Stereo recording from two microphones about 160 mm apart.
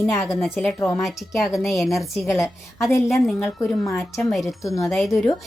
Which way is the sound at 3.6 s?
Centre (ahead or behind).